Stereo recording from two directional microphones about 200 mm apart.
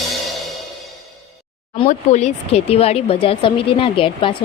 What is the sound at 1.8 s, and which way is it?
Speech, 35° left (ahead or behind).